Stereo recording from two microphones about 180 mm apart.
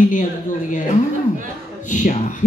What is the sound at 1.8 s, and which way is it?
Speech, 45° left (ahead or behind).